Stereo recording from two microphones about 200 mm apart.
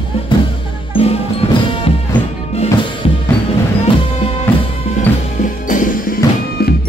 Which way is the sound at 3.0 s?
30° left (ahead or behind).